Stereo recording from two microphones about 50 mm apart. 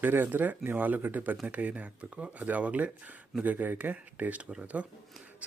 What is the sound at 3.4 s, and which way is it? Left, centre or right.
Speech, right.